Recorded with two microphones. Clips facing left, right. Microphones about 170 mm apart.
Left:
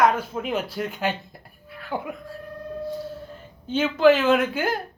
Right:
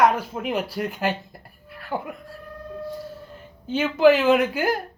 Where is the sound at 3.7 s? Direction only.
15° right (ahead or behind).